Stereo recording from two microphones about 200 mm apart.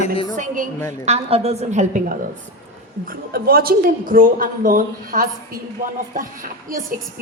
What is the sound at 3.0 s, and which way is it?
A woman's voice, 45° right (ahead or behind).